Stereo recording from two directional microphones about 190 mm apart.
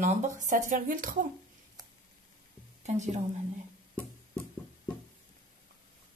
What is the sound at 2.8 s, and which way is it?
Speech, 35° right (ahead or behind).